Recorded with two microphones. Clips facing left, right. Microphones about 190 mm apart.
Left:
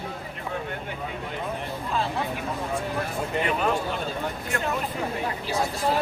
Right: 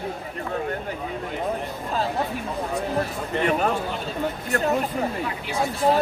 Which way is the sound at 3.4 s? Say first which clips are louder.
Right 4 dB; 45° right (ahead or behind).